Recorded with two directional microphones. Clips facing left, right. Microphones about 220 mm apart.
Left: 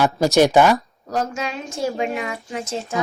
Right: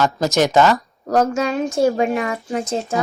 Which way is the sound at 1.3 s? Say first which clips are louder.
Right 9 dB; 40° right (ahead or behind).